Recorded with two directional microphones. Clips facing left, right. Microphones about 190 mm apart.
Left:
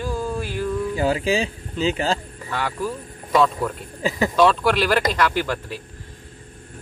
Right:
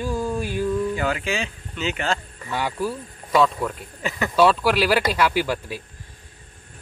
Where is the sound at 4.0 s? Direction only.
30° left (ahead or behind).